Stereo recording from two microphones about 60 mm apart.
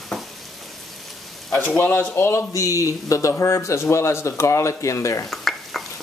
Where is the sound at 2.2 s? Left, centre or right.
Left.